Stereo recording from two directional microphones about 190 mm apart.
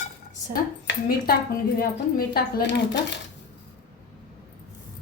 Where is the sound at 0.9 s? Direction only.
55° left (ahead or behind).